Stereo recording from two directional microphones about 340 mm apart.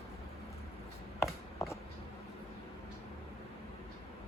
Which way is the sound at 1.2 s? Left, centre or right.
Centre.